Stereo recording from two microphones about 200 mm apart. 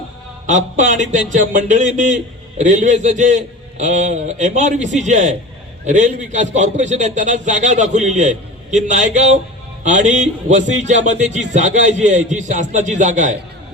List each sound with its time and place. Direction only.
0.4 s speech: 40° right (ahead or behind)